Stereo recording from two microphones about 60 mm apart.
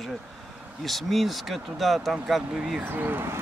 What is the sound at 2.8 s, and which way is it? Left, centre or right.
Speech, right.